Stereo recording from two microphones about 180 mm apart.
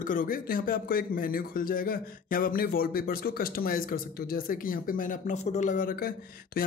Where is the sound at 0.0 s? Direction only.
50° left (ahead or behind).